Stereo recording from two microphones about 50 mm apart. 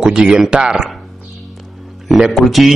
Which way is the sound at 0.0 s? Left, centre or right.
Centre.